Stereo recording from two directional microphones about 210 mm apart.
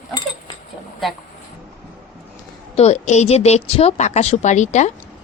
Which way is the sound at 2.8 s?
30° left (ahead or behind).